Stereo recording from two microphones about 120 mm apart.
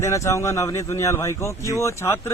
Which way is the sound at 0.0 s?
25° left (ahead or behind).